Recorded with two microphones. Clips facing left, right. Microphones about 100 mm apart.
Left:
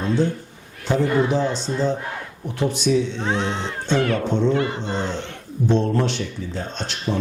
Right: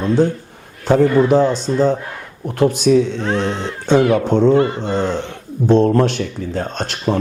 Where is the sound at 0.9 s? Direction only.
50° right (ahead or behind).